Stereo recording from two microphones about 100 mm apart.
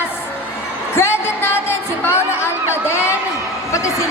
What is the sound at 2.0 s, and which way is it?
Chatter, 25° left (ahead or behind).